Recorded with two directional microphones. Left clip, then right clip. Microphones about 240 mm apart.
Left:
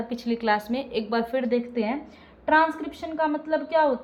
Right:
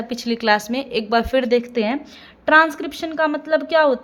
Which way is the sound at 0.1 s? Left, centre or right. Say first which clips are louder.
Right 7 dB; right.